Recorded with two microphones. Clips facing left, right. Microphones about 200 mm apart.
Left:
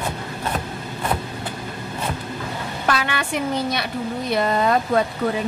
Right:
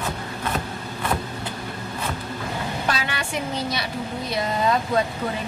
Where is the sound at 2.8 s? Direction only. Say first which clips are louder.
Left 8 dB; 55° left (ahead or behind).